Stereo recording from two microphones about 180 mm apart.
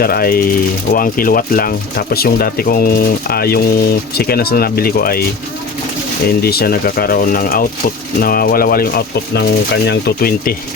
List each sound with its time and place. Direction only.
0.0 s speech: 55° left (ahead or behind)
6.4 s speech: 60° left (ahead or behind)